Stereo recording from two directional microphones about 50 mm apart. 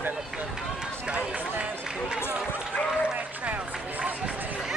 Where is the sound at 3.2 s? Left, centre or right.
Right.